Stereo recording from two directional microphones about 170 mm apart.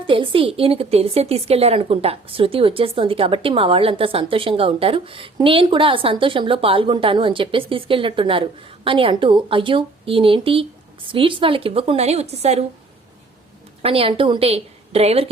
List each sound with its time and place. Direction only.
0.1 s a woman's voice: 30° right (ahead or behind)
13.8 s a woman's voice: 35° right (ahead or behind)